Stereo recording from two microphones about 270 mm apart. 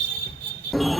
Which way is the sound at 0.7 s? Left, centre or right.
Centre.